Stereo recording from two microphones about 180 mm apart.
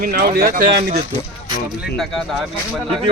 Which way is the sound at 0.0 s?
55° right (ahead or behind).